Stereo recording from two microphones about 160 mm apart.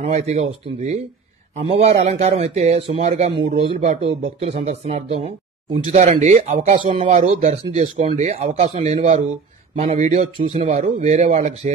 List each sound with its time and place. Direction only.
0.0 s speech: 45° right (ahead or behind)